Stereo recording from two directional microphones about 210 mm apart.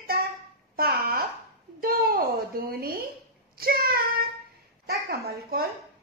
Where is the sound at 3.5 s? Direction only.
45° right (ahead or behind).